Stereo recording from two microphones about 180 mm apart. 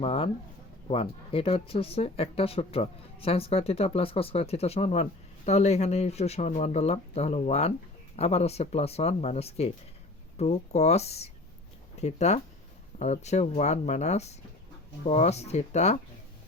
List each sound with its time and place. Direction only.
0.0 s speech: 30° left (ahead or behind)